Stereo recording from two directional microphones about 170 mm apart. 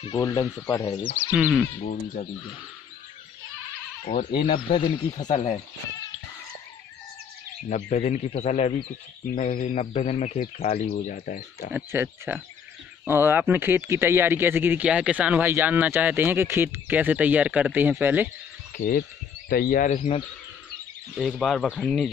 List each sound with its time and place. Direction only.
0.2 s speech: 20° left (ahead or behind)
1.3 s speech: 5° right (ahead or behind)
1.8 s speech: 45° left (ahead or behind)
4.0 s speech: 40° left (ahead or behind)
4.6 s speech: 30° left (ahead or behind)
7.7 s a man's voice: 40° left (ahead or behind)
11.7 s speech: 10° right (ahead or behind)
18.8 s speech: 60° left (ahead or behind)
20.0 s a man's voice: 35° left (ahead or behind)
21.1 s speech: centre (ahead or behind)